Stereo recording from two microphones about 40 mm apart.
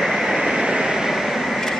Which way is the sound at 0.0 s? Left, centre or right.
Centre.